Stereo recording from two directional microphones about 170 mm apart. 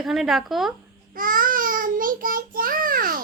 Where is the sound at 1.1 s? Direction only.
55° right (ahead or behind).